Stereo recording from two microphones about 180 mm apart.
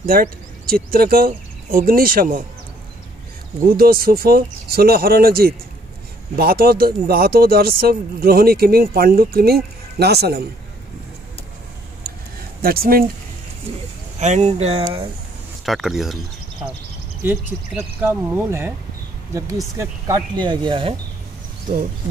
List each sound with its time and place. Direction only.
0.0 s speech: 55° right (ahead or behind)
3.6 s speech: 55° right (ahead or behind)
12.1 s a sound: 55° right (ahead or behind)
12.6 s speech: 55° right (ahead or behind)
14.2 s speech: 40° right (ahead or behind)
15.6 s speech: centre (ahead or behind)
17.2 s speech: 10° right (ahead or behind)
19.8 s speech: 25° right (ahead or behind)
21.7 s speech: 45° right (ahead or behind)